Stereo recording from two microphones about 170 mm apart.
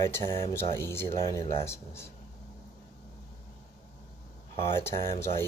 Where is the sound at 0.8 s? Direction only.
15° left (ahead or behind).